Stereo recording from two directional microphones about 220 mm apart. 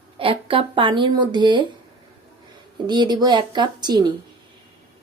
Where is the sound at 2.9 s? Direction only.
20° right (ahead or behind).